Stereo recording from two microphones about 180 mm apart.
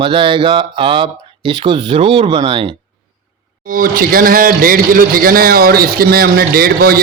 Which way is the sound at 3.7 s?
50° right (ahead or behind).